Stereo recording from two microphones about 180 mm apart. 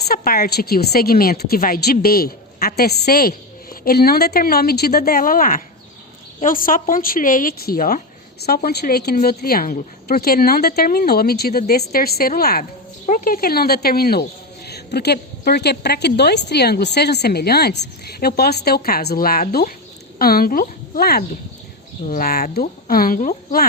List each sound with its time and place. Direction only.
0.1 s a woman's voice: 55° left (ahead or behind)